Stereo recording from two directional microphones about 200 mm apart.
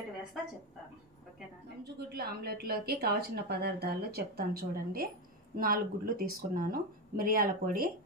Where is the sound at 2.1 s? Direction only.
50° right (ahead or behind).